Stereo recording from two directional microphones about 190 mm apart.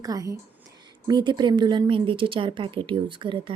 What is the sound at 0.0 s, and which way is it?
A woman's voice, 20° right (ahead or behind).